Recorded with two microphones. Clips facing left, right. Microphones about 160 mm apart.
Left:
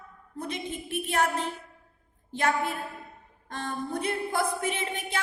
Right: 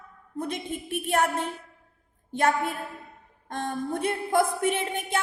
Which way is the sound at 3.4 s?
50° right (ahead or behind).